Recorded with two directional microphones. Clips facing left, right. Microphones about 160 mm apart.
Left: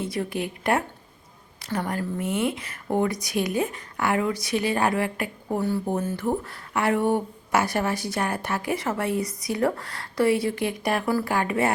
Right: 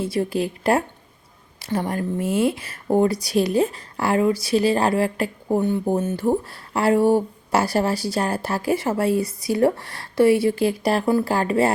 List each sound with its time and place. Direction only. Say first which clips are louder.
0.0 s speech: right 5 dB; 30° right (ahead or behind)